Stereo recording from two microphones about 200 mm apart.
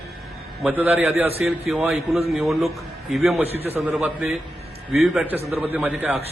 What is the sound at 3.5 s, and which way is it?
Speech, 30° right (ahead or behind).